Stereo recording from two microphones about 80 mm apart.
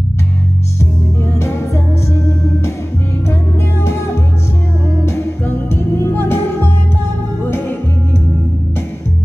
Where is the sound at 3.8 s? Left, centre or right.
Left.